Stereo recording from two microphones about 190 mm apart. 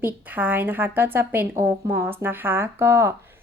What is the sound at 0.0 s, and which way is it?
A woman's voice, 10° right (ahead or behind).